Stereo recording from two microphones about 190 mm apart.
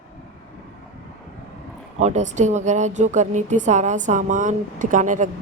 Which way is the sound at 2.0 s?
40° right (ahead or behind).